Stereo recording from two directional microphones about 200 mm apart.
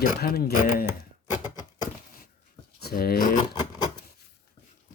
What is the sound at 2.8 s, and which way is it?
Speech, 50° left (ahead or behind).